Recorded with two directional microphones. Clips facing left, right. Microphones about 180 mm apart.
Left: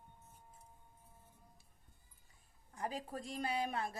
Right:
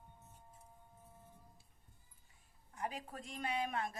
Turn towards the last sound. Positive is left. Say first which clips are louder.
# left 1 dB
turn(degrees=35)  # may be behind; listen again after turning